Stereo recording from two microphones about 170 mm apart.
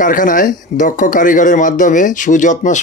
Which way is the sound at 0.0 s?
50° left (ahead or behind).